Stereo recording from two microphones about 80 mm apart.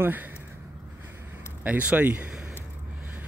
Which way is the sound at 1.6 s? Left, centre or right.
Centre.